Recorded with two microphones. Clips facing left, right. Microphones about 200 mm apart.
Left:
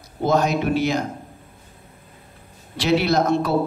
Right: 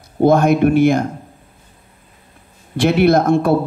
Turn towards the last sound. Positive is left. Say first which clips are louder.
# right 7 dB
turn(degrees=-50)  # may be behind; listen again after turning